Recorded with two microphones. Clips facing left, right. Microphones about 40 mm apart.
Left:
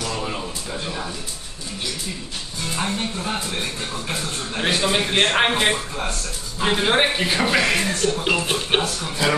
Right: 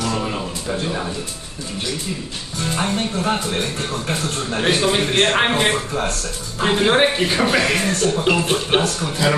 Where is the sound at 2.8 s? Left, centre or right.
Right.